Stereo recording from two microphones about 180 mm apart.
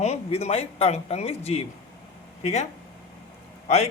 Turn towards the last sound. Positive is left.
turn(degrees=35)  # may be behind; listen again after turning